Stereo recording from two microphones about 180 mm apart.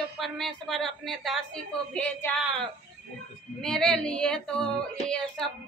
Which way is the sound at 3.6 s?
5° left (ahead or behind).